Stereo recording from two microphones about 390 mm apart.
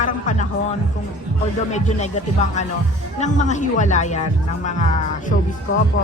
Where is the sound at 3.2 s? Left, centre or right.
Centre.